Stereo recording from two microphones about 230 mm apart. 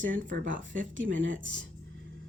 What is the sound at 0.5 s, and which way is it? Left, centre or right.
Speech, right.